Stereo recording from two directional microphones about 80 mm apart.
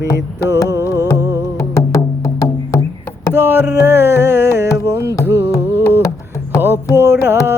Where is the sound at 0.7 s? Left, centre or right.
Right.